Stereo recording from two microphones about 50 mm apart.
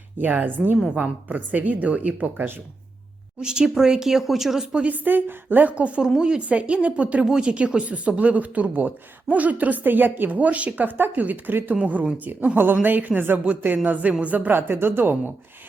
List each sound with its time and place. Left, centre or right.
0.2 s a woman's voice: right
0.9 s speech: centre
1.3 s a woman's voice: right
3.4 s speech: centre
4.9 s a woman's voice: right
7.3 s a woman's voice: centre; by 14.6 s right
14.7 s a woman's voice: right